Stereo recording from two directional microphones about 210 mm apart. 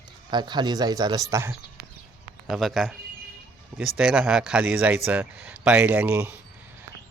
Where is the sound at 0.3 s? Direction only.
20° right (ahead or behind).